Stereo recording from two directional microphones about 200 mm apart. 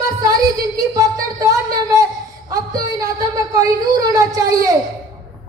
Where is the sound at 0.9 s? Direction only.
15° right (ahead or behind).